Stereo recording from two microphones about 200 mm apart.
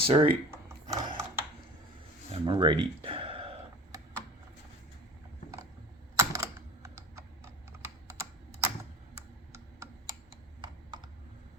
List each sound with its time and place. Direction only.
0.0 s speech: 25° right (ahead or behind)
0.9 s mechanisms: 15° right (ahead or behind)
2.3 s speech: 25° right (ahead or behind)
6.1 s computer keyboard: 15° right (ahead or behind)